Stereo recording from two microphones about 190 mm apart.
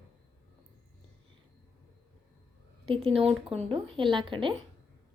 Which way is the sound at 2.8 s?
25° right (ahead or behind).